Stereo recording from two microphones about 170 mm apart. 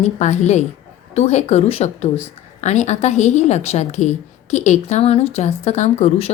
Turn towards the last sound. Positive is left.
turn(degrees=40)  # may be behind; listen again after turning